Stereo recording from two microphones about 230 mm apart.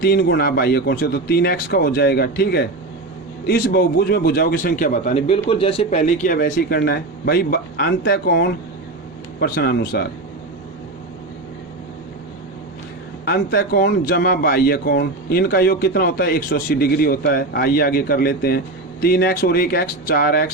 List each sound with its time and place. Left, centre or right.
0.0 s a man's voice: left
13.2 s a man's voice: left